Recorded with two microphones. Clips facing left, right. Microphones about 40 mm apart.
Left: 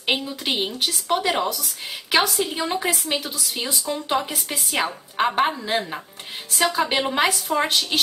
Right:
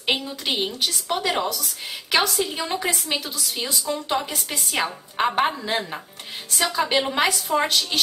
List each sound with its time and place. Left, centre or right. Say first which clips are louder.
0.0 s a woman's voice: left 1 dB; centre
7.6 s a woman's voice: left 1 dB; centre